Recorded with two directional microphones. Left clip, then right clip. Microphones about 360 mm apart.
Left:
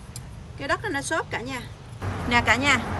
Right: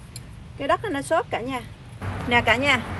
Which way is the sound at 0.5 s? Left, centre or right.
Centre.